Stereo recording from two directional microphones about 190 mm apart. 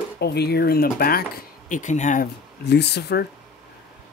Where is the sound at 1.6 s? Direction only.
40° left (ahead or behind).